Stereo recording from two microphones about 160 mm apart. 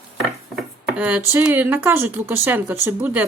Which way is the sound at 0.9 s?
10° right (ahead or behind).